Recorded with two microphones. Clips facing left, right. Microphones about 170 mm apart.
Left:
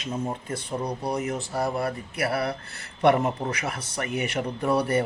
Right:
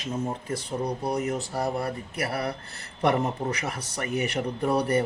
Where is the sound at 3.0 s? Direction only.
35° right (ahead or behind).